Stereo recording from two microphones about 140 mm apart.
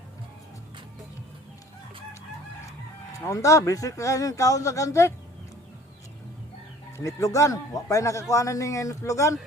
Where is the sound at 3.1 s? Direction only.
20° left (ahead or behind).